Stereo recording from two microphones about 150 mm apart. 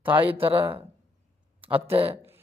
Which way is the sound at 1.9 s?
40° right (ahead or behind).